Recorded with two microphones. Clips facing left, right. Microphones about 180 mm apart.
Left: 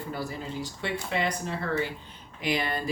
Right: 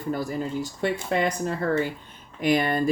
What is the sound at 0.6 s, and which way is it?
Speech, 45° right (ahead or behind).